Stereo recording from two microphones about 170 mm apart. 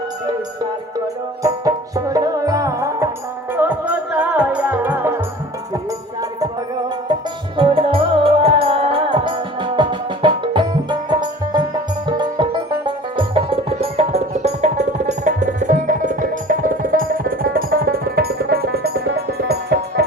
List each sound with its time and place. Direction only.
1.4 s music: 20° right (ahead or behind)
7.1 s music: 30° right (ahead or behind); by 20.1 s 70° right (ahead or behind)